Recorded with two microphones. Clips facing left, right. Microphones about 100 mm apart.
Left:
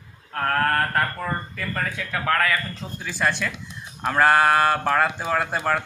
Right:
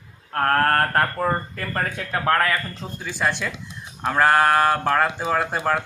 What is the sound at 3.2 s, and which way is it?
Speech, 5° right (ahead or behind).